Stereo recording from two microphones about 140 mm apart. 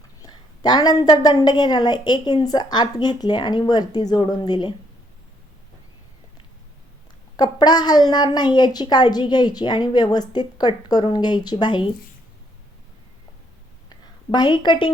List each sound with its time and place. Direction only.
0.2 s a woman's voice: 30° left (ahead or behind)
7.3 s a woman's voice: 30° left (ahead or behind)
14.3 s a woman's voice: 30° left (ahead or behind)